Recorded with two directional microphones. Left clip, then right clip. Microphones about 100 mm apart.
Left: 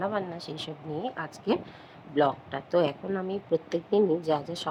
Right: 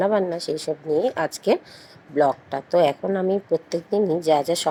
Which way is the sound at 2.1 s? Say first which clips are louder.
Right 6 dB; 25° right (ahead or behind).